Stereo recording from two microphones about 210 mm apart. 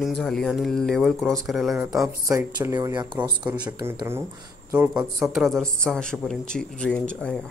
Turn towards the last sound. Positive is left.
turn(degrees=5)  # may be behind; listen again after turning